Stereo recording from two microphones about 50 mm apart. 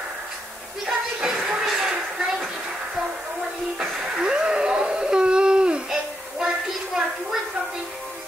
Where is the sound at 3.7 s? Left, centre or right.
Centre.